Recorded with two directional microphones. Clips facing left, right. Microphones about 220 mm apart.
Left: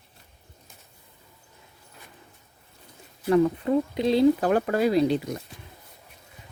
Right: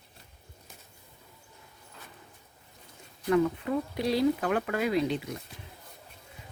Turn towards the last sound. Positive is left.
turn(degrees=35)  # may be behind; listen again after turning